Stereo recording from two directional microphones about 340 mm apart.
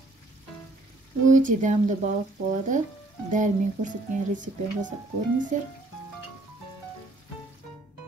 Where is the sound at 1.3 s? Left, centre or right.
Right.